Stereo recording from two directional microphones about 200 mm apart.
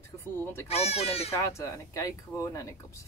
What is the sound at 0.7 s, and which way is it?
Speech, 30° left (ahead or behind).